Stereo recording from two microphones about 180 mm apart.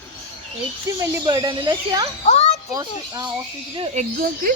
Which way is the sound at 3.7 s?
35° right (ahead or behind).